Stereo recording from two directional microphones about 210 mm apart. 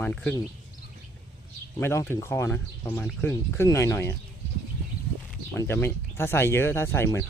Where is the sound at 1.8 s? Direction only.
10° left (ahead or behind).